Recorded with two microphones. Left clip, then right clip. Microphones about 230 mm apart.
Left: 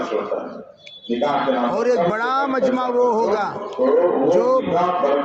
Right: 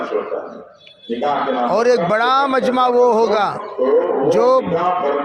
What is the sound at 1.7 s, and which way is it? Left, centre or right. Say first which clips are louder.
A man's voice: right 4 dB; right.